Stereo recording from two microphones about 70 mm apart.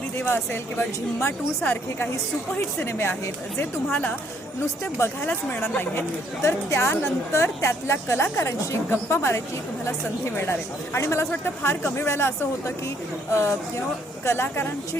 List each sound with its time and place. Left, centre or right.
0.2 s a woman's voice: left
2.8 s a woman's voice: left
4.6 s a woman's voice: left
5.2 s speech: left
5.9 s a woman's voice: left